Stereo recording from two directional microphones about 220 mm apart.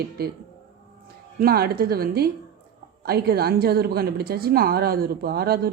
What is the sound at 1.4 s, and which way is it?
A woman's voice, 45° right (ahead or behind).